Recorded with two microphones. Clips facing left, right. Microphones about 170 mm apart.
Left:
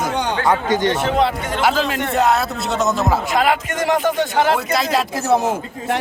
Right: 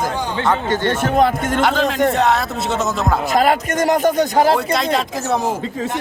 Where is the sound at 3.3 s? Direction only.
40° right (ahead or behind).